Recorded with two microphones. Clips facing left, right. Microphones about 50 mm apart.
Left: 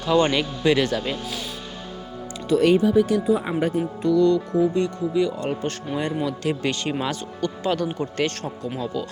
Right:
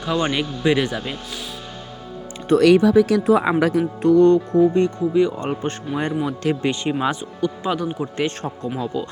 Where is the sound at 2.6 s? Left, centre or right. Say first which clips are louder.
Right 4 dB; right.